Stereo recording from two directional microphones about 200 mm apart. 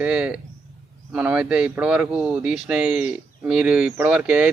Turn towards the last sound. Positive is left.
turn(degrees=-5)  # may be behind; listen again after turning